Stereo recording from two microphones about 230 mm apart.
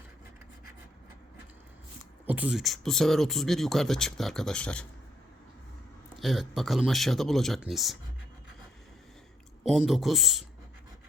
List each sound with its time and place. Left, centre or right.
2.2 s speech: centre
6.1 s speech: centre
9.6 s speech: centre